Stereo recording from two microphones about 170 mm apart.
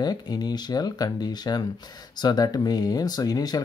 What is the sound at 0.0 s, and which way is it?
Speech, 25° left (ahead or behind).